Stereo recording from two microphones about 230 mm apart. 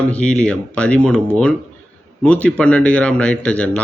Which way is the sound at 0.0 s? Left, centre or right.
Centre.